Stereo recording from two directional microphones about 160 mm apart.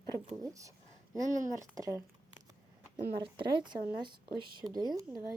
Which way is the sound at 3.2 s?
30° right (ahead or behind).